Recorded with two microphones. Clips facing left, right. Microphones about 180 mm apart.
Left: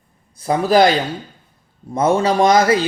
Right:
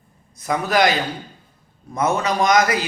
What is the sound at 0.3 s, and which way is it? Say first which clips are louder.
A man's voice: left 6 dB; 30° left (ahead or behind).